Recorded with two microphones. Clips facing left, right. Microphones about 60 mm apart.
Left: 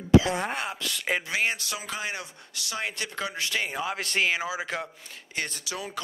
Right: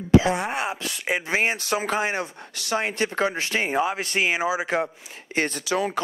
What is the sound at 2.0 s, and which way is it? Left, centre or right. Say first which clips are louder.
Speech: right 8 dB; right.